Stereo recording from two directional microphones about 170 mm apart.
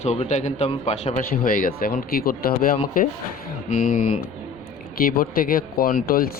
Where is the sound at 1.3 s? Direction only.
55° left (ahead or behind).